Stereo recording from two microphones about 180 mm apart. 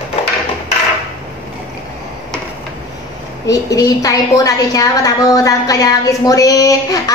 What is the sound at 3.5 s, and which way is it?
A woman's voice, 20° left (ahead or behind).